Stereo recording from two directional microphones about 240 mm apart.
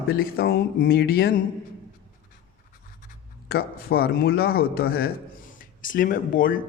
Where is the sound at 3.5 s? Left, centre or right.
Left.